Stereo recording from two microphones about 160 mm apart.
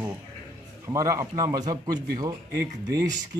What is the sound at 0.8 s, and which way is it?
Speech, 20° right (ahead or behind).